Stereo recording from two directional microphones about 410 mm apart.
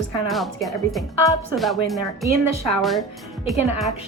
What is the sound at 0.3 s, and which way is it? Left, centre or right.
Speech, centre.